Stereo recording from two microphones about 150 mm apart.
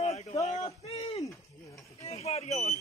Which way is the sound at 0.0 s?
45° left (ahead or behind).